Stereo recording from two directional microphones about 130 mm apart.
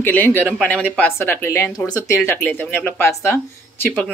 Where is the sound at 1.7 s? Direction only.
30° left (ahead or behind).